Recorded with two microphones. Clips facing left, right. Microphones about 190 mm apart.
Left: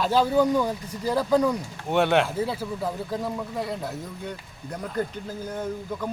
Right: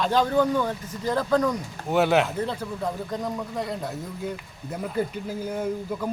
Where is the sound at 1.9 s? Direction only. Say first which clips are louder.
Even; centre (ahead or behind).